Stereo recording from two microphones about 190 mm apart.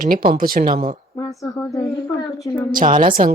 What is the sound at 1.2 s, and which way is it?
Speech, 15° left (ahead or behind).